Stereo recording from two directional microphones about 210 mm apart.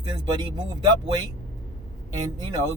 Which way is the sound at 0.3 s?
20° right (ahead or behind).